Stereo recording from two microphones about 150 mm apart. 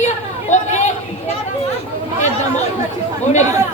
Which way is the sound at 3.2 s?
50° left (ahead or behind).